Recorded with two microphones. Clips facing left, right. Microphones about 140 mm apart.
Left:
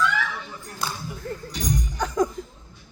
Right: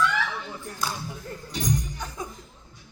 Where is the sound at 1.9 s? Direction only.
80° left.